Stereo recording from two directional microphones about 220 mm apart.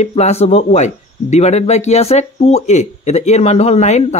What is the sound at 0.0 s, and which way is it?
Speech, 30° left (ahead or behind).